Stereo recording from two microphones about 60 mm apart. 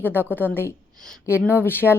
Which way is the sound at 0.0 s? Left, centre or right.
Left.